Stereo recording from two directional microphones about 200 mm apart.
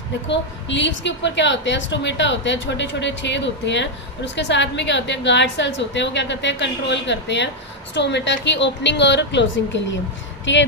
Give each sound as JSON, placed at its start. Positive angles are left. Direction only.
{"t": 0.3, "sound": "a woman's voice", "side_deg": 65}